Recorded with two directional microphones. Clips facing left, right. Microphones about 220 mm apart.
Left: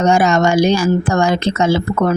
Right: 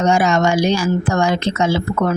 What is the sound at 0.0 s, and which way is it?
Speech, 45° left (ahead or behind).